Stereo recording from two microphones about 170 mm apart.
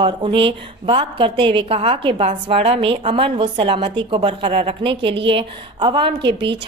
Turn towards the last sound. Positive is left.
turn(degrees=-30)  # may be behind; listen again after turning